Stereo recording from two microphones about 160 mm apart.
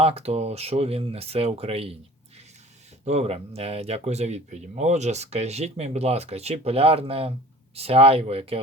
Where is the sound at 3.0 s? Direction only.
45° right (ahead or behind).